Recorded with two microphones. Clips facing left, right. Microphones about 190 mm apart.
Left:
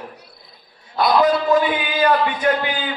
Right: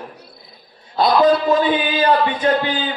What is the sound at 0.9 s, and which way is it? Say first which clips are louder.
A man's voice: right 2 dB; 25° right (ahead or behind).